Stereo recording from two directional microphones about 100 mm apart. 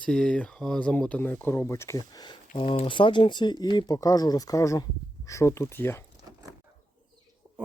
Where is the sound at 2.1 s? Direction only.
45° left (ahead or behind).